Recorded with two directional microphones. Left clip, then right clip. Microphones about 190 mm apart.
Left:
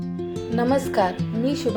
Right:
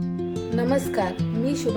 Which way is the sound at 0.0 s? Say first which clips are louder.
Right 1 dB; centre (ahead or behind).